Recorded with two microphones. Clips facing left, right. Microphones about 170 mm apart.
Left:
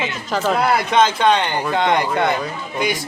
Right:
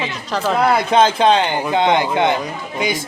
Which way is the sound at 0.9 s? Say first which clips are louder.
Right 2 dB; 30° right (ahead or behind).